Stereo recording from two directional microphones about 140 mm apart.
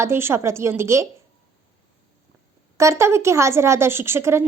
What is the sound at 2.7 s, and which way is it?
A woman's voice, 20° right (ahead or behind).